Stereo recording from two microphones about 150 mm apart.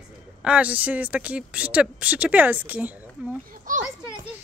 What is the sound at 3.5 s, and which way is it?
Speech, 60° right (ahead or behind).